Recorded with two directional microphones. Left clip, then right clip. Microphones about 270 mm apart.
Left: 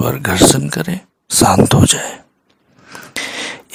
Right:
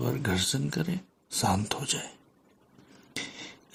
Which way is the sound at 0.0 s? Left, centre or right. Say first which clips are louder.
Left 17 dB; left.